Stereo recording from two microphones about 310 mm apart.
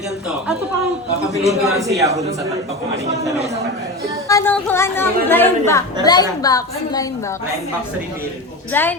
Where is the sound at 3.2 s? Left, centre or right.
Centre.